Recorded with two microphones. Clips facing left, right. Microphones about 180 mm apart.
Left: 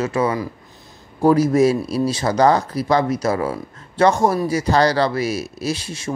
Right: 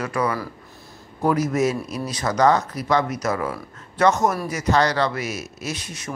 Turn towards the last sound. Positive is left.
turn(degrees=30)  # may be behind; listen again after turning